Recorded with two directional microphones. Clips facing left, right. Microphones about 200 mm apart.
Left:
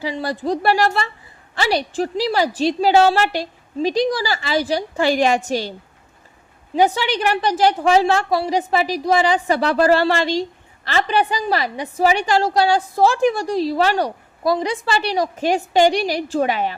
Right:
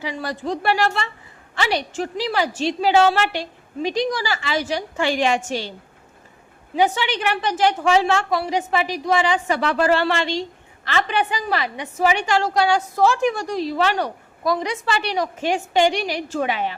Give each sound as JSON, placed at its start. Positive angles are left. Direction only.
{"t": 0.0, "sound": "a woman's voice", "side_deg": 30}
{"t": 6.7, "sound": "a woman's voice", "side_deg": 40}